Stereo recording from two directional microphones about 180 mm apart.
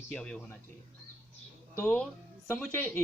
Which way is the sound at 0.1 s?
5° left (ahead or behind).